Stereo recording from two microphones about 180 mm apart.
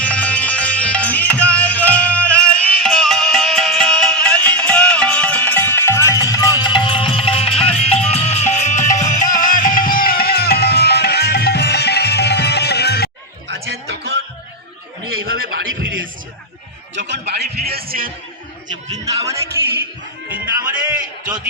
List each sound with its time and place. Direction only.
0.0 s music: 5° left (ahead or behind); by 13.1 s 65° left (ahead or behind)
13.5 s a sound: 65° right (ahead or behind)
15.2 s music: 75° right (ahead or behind); by 16.0 s 90° right
16.9 s music: 75° right (ahead or behind); by 18.1 s 55° right (ahead or behind)
18.9 s a sound: 20° right (ahead or behind)
20.3 s music: 10° right (ahead or behind)